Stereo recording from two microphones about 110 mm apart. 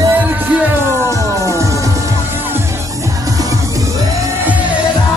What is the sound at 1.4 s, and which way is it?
Music, 30° right (ahead or behind).